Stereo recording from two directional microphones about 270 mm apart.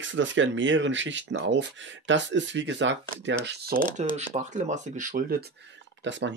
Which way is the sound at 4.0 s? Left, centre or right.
Right.